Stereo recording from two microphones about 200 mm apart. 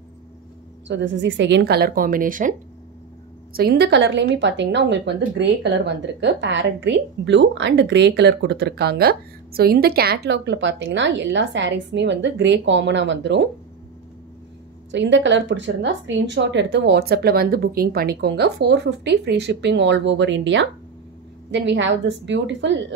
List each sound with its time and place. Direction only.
0.8 s speech: 65° right (ahead or behind); by 2.5 s 40° right (ahead or behind)
3.5 s speech: 55° right (ahead or behind)
14.9 s speech: 65° right (ahead or behind)